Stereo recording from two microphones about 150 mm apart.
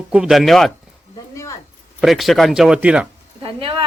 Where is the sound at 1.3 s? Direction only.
20° left (ahead or behind).